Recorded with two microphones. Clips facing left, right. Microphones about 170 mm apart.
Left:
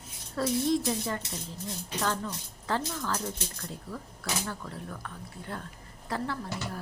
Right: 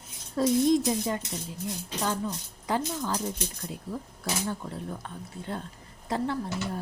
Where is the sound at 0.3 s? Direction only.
20° right (ahead or behind).